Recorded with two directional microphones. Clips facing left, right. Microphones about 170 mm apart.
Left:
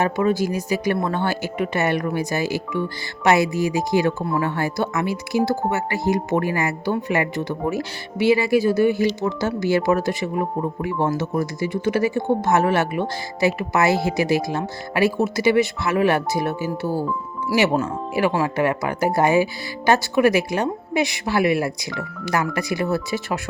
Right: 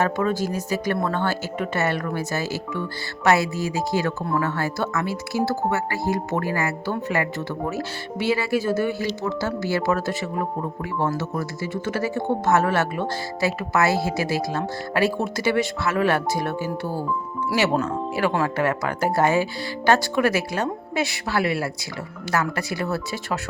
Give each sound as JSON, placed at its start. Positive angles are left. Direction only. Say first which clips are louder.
{"t": 0.0, "sound": "speech", "louder": "left 3 dB", "side_deg": 10}